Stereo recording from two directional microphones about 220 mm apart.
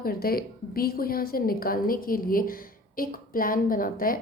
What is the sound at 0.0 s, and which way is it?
A woman's voice, 45° left (ahead or behind).